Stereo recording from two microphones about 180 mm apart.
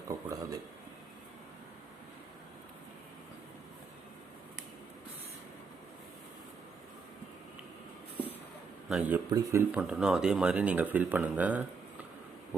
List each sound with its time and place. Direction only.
0.1 s a sound: 15° right (ahead or behind)
8.9 s speech: 5° right (ahead or behind)
9.8 s speech: 5° right (ahead or behind)